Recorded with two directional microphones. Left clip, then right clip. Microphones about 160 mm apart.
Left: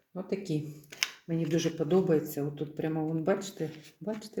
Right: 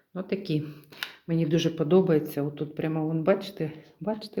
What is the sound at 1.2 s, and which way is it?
Speech, 20° right (ahead or behind).